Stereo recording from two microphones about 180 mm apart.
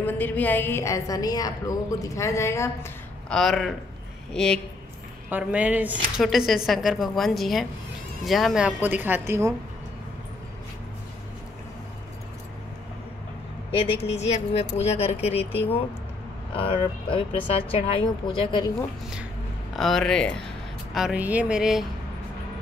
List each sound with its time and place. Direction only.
0.0 s a woman's voice: 10° left (ahead or behind)
3.3 s speech: centre (ahead or behind)
5.3 s a woman's voice: 10° right (ahead or behind)
13.7 s a woman's voice: 30° left (ahead or behind)
16.5 s speech: 30° left (ahead or behind)
19.7 s speech: centre (ahead or behind)